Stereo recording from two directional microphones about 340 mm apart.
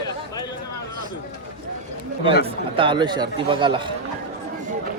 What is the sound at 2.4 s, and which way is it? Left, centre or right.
Speech, centre.